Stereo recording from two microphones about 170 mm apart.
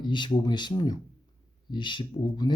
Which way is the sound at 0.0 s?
25° left (ahead or behind).